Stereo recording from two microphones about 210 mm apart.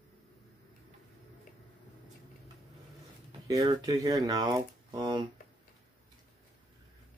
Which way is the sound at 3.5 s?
20° right (ahead or behind).